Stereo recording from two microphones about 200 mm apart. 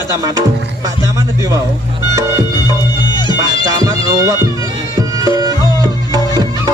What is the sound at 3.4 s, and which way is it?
Music, 15° right (ahead or behind).